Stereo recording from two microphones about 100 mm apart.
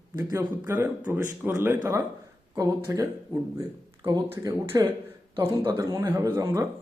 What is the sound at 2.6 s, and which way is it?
Speech, 35° right (ahead or behind).